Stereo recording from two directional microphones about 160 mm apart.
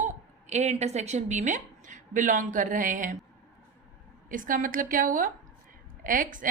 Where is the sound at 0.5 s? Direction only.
45° right (ahead or behind).